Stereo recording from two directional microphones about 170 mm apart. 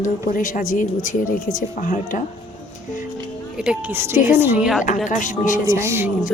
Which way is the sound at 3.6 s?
5° right (ahead or behind).